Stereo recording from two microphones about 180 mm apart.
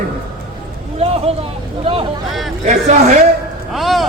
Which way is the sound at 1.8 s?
30° right (ahead or behind).